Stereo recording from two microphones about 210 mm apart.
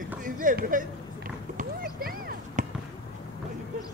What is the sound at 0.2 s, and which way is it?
Speech, 40° right (ahead or behind).